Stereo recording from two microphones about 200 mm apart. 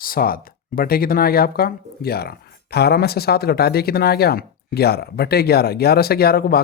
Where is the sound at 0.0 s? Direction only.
45° left (ahead or behind).